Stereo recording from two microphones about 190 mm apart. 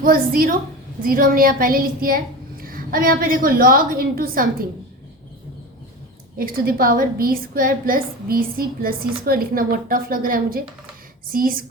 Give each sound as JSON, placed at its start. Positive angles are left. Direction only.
{"t": 0.0, "sound": "a woman's voice", "side_deg": -50}
{"t": 6.4, "sound": "a woman's voice", "side_deg": -50}